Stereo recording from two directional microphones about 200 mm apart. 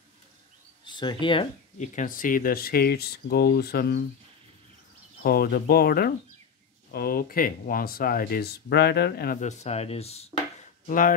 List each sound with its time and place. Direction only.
0.8 s speech: 25° left (ahead or behind)
2.0 s speech: 40° left (ahead or behind)
5.2 s speech: 50° left (ahead or behind)
9.4 s speech: 35° left (ahead or behind)
10.9 s speech: 45° left (ahead or behind)